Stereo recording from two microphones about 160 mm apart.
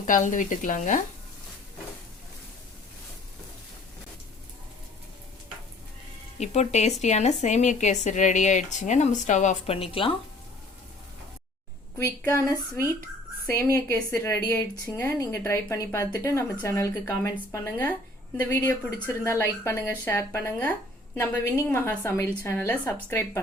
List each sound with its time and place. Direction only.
0.1 s speech: 55° left (ahead or behind)
6.4 s speech: 45° left (ahead or behind)
9.7 s speech: 35° left (ahead or behind)
11.9 s a woman's voice: 20° left (ahead or behind)